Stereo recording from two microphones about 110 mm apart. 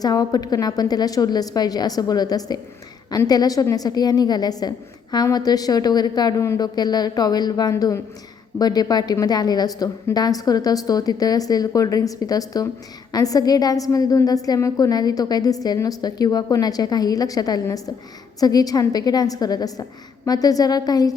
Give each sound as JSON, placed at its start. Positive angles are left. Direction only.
{"t": 0.0, "sound": "a woman's voice", "side_deg": 35}